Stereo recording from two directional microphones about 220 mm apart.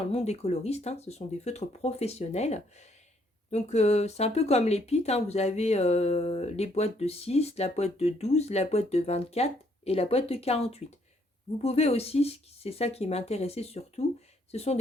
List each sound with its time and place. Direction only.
0.1 s speech: 30° left (ahead or behind)